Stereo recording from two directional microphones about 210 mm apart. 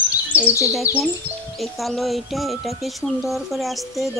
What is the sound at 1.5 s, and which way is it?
Speech, centre (ahead or behind).